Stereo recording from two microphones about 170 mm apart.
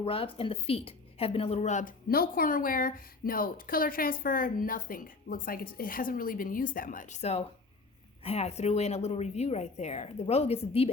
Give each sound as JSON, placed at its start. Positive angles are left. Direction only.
{"t": 0.0, "sound": "a woman's voice", "side_deg": 35}
{"t": 2.0, "sound": "a woman's voice", "side_deg": 60}